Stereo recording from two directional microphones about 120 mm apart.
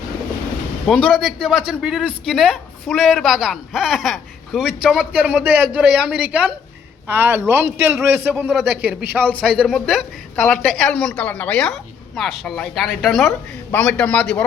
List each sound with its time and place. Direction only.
1.0 s a man's voice: centre (ahead or behind)